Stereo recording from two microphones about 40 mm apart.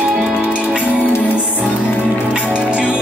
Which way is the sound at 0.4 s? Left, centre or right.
Right.